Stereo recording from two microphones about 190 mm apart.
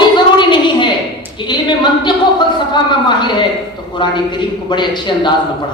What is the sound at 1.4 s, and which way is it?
A woman's voice, 25° left (ahead or behind).